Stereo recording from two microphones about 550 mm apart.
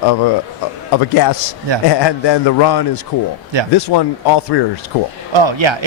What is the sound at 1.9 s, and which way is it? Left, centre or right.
A man's voice, left.